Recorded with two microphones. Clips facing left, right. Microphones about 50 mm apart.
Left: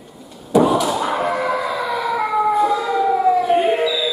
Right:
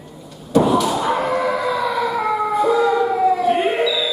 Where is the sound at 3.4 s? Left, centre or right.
Centre.